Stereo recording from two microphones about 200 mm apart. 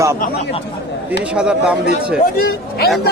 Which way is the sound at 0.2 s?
35° left (ahead or behind).